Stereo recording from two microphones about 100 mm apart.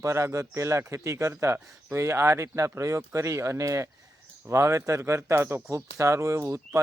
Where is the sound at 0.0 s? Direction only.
30° right (ahead or behind).